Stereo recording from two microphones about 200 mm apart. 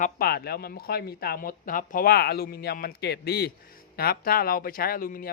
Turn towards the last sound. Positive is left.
turn(degrees=45)  # may be behind; listen again after turning